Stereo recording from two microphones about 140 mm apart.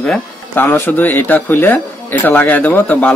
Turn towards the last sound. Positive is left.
turn(degrees=10)  # may be behind; listen again after turning